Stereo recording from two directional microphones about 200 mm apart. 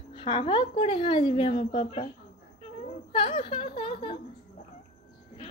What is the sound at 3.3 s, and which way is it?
Speech, 25° left (ahead or behind).